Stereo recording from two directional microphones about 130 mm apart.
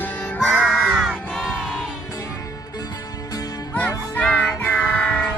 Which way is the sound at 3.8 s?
10° left (ahead or behind).